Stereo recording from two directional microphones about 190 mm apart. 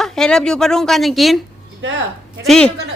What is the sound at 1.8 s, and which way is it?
Speech, 80° right.